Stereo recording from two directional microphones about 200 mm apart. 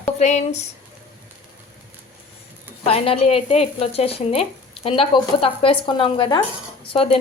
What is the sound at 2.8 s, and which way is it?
Speech, 30° left (ahead or behind).